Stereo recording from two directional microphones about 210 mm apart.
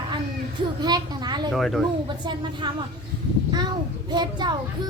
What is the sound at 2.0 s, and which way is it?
Speech, 20° right (ahead or behind).